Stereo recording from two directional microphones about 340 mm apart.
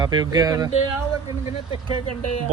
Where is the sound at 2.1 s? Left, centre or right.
Left.